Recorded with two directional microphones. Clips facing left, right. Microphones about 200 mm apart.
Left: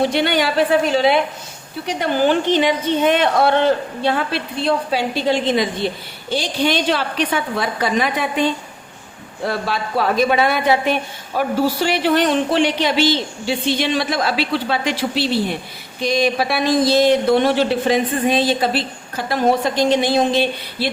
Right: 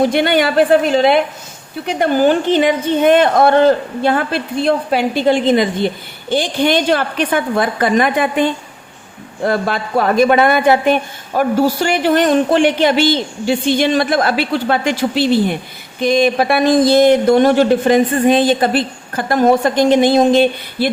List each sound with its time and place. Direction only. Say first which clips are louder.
0.0 s speech: right 4 dB; 50° right (ahead or behind)
2.0 s speech: right 4 dB; 50° right (ahead or behind)